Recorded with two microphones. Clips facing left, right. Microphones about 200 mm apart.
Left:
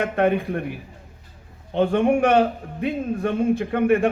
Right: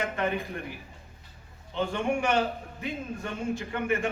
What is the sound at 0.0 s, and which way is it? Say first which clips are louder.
Speech: left 9 dB; 60° left (ahead or behind).